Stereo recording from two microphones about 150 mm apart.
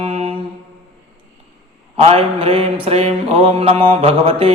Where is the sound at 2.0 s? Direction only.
40° right (ahead or behind).